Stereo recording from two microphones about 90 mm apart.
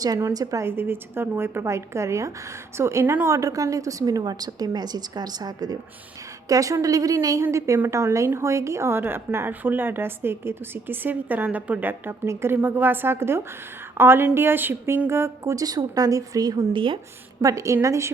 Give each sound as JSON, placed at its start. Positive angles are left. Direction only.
{"t": 0.6, "sound": "a woman's voice", "side_deg": -25}
{"t": 15.6, "sound": "a woman's voice", "side_deg": -45}
{"t": 16.7, "sound": "speech", "side_deg": -70}
{"t": 17.4, "sound": "a woman's voice", "side_deg": -35}